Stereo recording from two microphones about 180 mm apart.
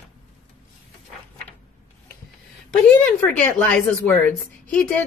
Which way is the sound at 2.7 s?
5° left (ahead or behind).